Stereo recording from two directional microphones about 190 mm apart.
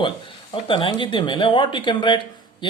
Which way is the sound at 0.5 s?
25° left (ahead or behind).